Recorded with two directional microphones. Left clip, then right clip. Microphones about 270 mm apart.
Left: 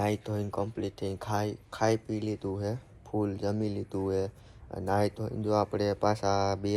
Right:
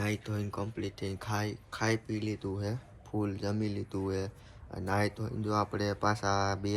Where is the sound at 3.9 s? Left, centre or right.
Centre.